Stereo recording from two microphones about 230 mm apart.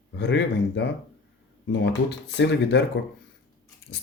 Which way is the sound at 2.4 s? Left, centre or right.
Left.